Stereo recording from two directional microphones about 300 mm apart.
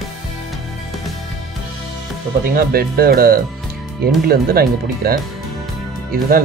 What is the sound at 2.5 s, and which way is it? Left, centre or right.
Speech, right.